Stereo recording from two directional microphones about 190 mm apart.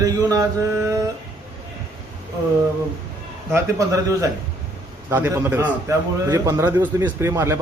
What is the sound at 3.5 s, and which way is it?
Speech, 15° right (ahead or behind).